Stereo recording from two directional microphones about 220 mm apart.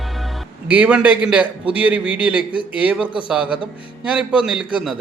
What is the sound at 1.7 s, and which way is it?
Speech, 5° right (ahead or behind).